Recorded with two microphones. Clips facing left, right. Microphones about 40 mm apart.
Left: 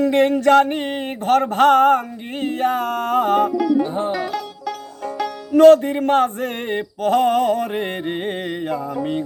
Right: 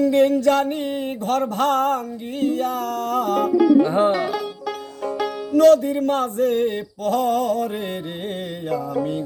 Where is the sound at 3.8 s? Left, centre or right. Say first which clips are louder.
Right 4 dB; right.